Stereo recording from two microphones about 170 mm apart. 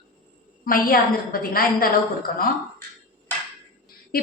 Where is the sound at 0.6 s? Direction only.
55° left (ahead or behind).